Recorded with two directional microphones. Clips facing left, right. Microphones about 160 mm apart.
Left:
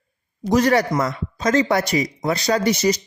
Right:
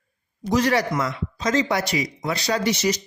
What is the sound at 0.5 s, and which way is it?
Speech, 50° left (ahead or behind).